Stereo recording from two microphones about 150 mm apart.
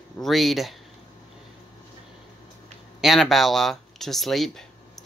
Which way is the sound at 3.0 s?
Centre (ahead or behind).